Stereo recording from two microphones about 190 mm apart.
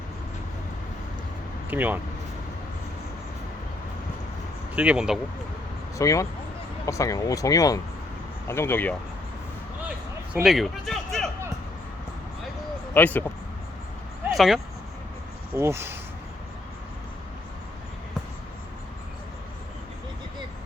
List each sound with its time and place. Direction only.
1.7 s speech: 10° right (ahead or behind)
4.7 s speech: 5° right (ahead or behind)
6.0 s speech: 15° left (ahead or behind)
10.4 s speech: centre (ahead or behind)
12.9 s speech: 10° left (ahead or behind)
14.3 s speech: centre (ahead or behind)
15.5 s speech: 15° right (ahead or behind)